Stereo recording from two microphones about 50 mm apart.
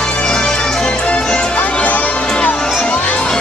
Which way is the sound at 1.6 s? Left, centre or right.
Left.